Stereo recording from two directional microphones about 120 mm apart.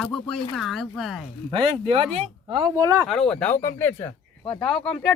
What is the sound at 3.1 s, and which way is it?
Speech, 5° left (ahead or behind).